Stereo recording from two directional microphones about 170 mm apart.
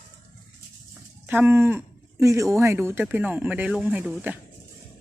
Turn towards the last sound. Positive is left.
turn(degrees=-10)  # may be behind; listen again after turning